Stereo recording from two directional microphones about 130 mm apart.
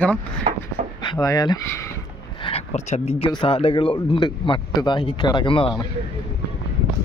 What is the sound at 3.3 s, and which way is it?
Speech, 40° left (ahead or behind).